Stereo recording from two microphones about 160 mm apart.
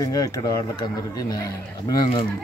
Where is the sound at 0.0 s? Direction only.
20° left (ahead or behind).